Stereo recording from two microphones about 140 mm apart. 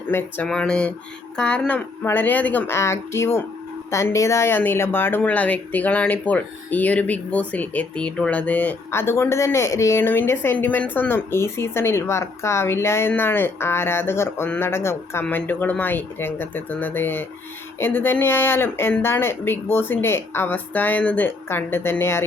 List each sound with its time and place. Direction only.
0.1 s speech: 15° left (ahead or behind)
0.4 s speech: 5° left (ahead or behind)